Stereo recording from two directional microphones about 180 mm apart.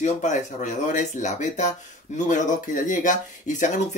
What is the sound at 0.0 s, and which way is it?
Speech, 40° left (ahead or behind).